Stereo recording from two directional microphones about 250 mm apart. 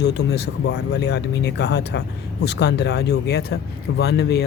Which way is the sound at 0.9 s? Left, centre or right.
Left.